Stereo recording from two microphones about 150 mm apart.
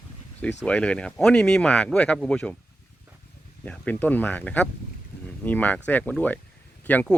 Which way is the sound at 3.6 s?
10° left (ahead or behind).